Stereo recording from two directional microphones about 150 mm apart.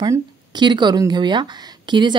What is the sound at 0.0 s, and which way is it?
Speech, 25° right (ahead or behind).